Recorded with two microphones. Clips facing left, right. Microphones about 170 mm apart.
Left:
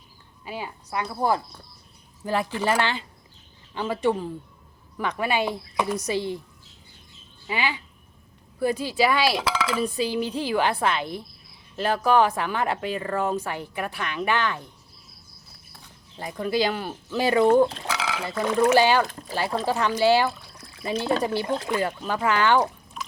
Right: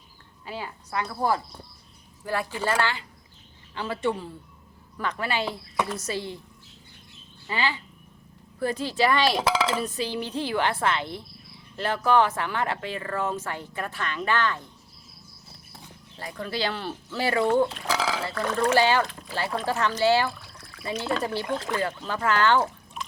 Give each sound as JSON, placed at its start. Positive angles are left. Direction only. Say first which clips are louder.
{"t": 0.4, "sound": "speech", "louder": "left 1 dB", "side_deg": 15}
{"t": 7.4, "sound": "speech", "louder": "left 1 dB", "side_deg": 15}
{"t": 9.4, "sound": "speech", "louder": "right 1 dB", "side_deg": -30}
{"t": 9.8, "sound": "speech", "louder": "left 4 dB", "side_deg": 10}
{"t": 16.1, "sound": "speech", "louder": "left 7 dB", "side_deg": 15}
{"t": 17.8, "sound": "burping", "louder": "right 2 dB", "side_deg": -35}
{"t": 18.3, "sound": "speech", "louder": "left 6 dB", "side_deg": 10}
{"t": 21.4, "sound": "speech", "louder": "left 2 dB", "side_deg": 20}